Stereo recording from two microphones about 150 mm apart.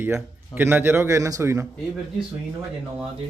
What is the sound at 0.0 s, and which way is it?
A man's voice, 15° right (ahead or behind).